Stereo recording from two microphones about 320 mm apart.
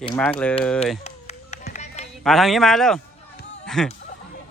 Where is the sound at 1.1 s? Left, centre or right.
Left.